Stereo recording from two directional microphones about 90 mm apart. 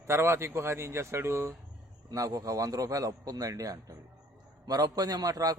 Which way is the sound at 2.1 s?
45° right (ahead or behind).